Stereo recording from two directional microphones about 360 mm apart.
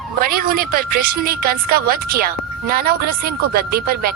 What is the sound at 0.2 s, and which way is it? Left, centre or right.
Speech, right.